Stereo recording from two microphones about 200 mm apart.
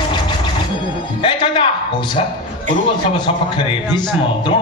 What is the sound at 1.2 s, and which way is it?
Music, 25° left (ahead or behind).